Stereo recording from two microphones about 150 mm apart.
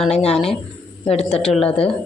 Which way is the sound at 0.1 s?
45° left (ahead or behind).